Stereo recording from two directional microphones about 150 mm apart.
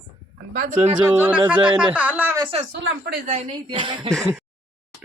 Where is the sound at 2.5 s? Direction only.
40° right (ahead or behind).